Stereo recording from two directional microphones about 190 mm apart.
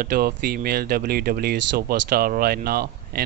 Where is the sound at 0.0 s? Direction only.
55° right (ahead or behind).